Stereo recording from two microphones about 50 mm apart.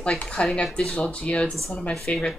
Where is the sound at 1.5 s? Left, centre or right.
Centre.